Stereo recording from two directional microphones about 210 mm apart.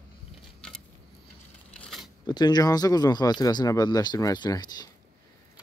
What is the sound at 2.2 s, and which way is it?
Speech, 20° left (ahead or behind).